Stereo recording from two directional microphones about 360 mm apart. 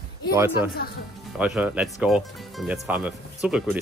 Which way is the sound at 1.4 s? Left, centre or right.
Centre.